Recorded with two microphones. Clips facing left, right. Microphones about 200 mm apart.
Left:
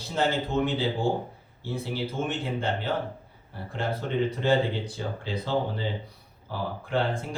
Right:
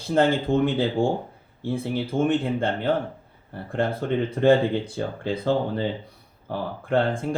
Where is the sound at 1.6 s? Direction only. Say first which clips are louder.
Right 5 dB; 55° right (ahead or behind).